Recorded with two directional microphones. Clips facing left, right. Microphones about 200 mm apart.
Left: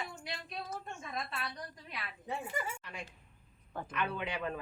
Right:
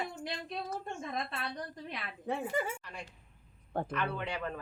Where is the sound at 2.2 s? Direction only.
55° right (ahead or behind).